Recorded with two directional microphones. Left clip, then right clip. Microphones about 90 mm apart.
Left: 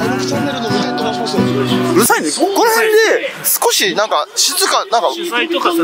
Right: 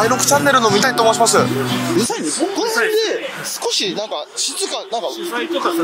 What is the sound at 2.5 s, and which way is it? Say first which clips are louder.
Speech: left 7 dB; 35° left (ahead or behind).